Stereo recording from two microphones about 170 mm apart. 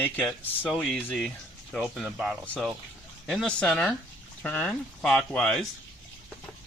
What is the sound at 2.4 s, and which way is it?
Speech, 10° left (ahead or behind).